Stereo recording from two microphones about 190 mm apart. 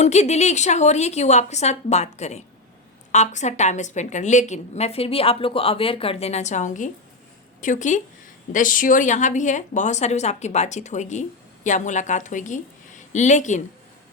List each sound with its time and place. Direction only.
0.0 s a woman's voice: 35° left (ahead or behind)